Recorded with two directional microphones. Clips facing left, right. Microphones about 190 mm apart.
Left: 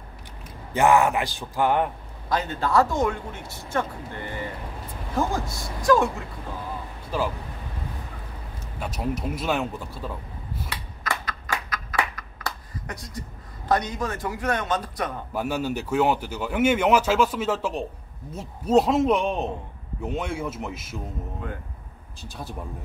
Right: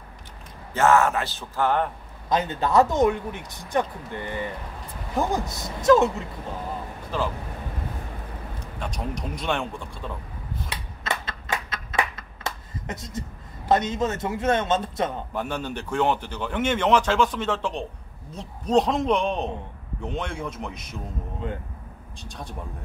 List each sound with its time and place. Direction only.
0.7 s speech: 15° left (ahead or behind)
2.2 s a man's voice: 20° right (ahead or behind)
7.1 s speech: 10° left (ahead or behind)
8.7 s speech: 5° left (ahead or behind)
10.7 s a sound: 25° right (ahead or behind)
13.7 s a man's voice: 25° right (ahead or behind)
15.3 s speech: 5° left (ahead or behind)
21.4 s a man's voice: 25° right (ahead or behind)
22.2 s speech: 5° left (ahead or behind)